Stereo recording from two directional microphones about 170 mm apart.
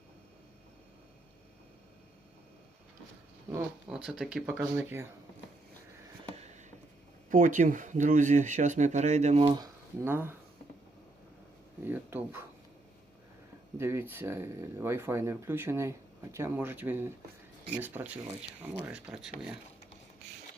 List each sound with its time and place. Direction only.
3.8 s speech: 5° right (ahead or behind)
4.8 s speech: 15° right (ahead or behind)
6.4 s a sound: 45° right (ahead or behind)
7.3 s speech: 50° right (ahead or behind)
9.6 s speech: 15° right (ahead or behind)
11.9 s speech: 10° right (ahead or behind)
13.7 s speech: 15° right (ahead or behind)